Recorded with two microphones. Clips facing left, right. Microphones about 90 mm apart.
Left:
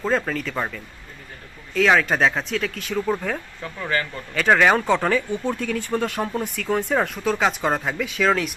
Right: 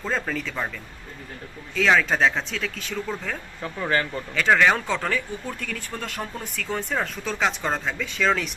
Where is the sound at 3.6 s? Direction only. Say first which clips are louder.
Right 1 dB; 20° right (ahead or behind).